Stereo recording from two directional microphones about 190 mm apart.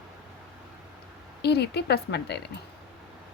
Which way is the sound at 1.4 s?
60° left (ahead or behind).